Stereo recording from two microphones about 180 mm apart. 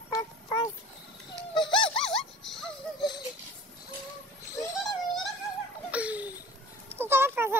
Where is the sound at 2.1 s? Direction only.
Centre (ahead or behind).